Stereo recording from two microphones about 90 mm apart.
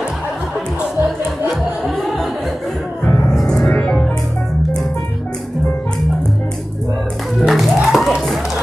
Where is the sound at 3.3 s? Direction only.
5° left (ahead or behind).